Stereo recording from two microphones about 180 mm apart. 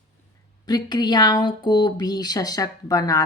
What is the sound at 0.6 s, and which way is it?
A woman's voice, 25° left (ahead or behind).